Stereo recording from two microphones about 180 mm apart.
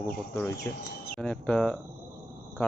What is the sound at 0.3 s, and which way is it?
Speech, 10° left (ahead or behind).